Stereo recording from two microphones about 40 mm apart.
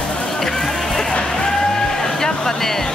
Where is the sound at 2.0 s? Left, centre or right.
Centre.